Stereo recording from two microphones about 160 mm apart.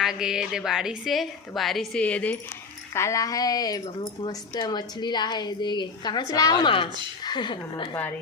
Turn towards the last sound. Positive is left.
turn(degrees=30)  # may be behind; listen again after turning